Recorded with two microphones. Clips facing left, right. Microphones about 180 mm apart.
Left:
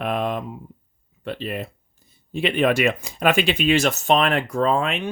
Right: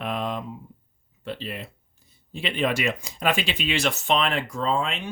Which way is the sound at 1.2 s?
55° left (ahead or behind).